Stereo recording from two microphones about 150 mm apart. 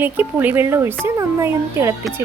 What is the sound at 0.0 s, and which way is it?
A woman's voice, 10° right (ahead or behind).